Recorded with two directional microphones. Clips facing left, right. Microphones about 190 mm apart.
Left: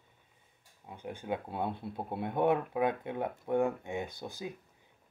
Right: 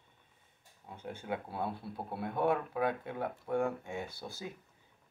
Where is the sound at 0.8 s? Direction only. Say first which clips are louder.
Left 2 dB; 15° left (ahead or behind).